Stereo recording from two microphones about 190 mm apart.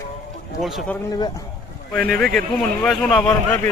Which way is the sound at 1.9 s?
5° left (ahead or behind).